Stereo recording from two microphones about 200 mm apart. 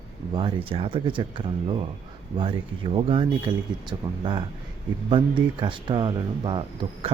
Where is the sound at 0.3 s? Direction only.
25° right (ahead or behind).